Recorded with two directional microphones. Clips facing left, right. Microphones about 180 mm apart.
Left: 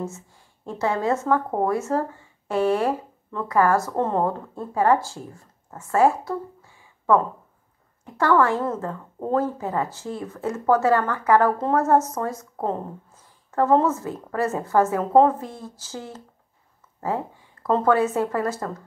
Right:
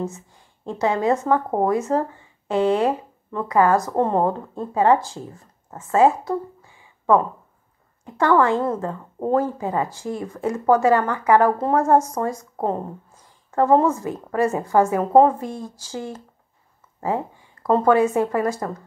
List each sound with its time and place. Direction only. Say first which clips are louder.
0.7 s a woman's voice: right 3 dB; 15° right (ahead or behind)
17.6 s a woman's voice: right 3 dB; 10° right (ahead or behind)